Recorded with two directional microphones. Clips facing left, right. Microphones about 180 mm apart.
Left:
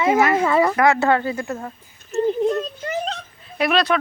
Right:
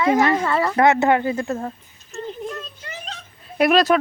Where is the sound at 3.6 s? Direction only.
40° right (ahead or behind).